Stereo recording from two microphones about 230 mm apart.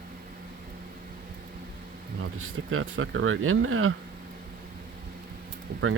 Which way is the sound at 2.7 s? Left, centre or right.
Right.